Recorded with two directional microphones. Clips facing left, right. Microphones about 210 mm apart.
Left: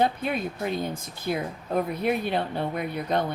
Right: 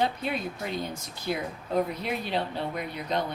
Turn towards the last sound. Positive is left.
turn(degrees=55)  # may be behind; listen again after turning